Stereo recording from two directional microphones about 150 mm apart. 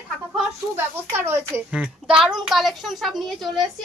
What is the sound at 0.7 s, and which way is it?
A woman's voice, 15° right (ahead or behind).